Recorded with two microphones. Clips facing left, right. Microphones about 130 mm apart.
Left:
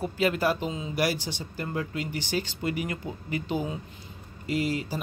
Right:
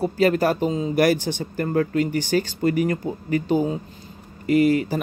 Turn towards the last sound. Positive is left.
turn(degrees=-55)  # may be behind; listen again after turning